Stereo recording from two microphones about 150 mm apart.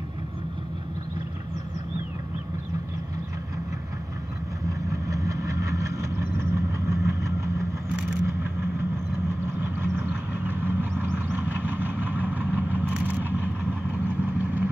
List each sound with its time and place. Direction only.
5.0 s vehicle: 20° right (ahead or behind)